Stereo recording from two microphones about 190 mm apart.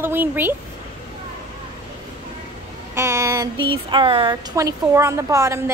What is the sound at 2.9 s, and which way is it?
A woman's voice, 15° right (ahead or behind).